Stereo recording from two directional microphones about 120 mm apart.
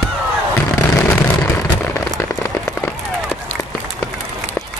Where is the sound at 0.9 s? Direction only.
15° left (ahead or behind).